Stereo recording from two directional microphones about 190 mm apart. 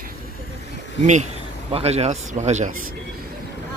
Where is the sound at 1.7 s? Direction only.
30° right (ahead or behind).